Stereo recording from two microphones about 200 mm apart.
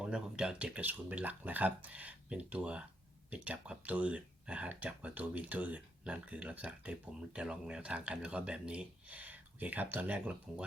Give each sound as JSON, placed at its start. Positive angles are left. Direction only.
{"t": 0.0, "sound": "speech", "side_deg": -5}